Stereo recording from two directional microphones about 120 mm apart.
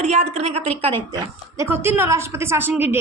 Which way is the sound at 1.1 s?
25° right (ahead or behind).